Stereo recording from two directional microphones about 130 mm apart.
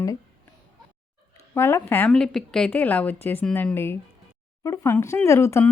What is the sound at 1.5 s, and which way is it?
A woman's voice, 20° left (ahead or behind).